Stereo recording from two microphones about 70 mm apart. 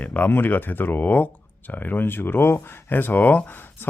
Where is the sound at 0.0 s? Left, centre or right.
Left.